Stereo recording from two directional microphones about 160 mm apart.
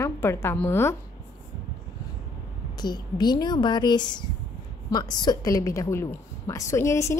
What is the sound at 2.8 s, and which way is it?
A woman's voice, 25° left (ahead or behind).